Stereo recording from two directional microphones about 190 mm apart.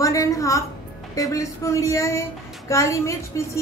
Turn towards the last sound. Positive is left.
turn(degrees=15)  # may be behind; listen again after turning